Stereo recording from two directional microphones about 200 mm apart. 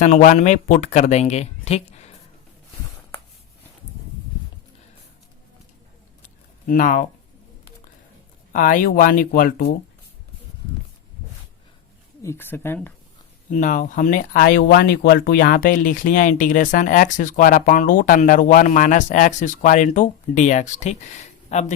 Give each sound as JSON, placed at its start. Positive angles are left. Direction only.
{"t": 0.0, "sound": "speech", "side_deg": 35}
{"t": 6.2, "sound": "a sound", "side_deg": 40}
{"t": 8.5, "sound": "speech", "side_deg": 40}
{"t": 12.2, "sound": "speech", "side_deg": 10}
{"t": 13.5, "sound": "speech", "side_deg": 40}